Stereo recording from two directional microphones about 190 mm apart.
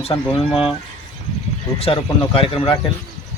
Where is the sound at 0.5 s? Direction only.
Centre (ahead or behind).